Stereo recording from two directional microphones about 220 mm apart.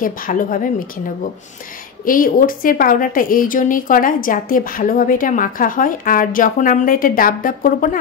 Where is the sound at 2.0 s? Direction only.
40° left (ahead or behind).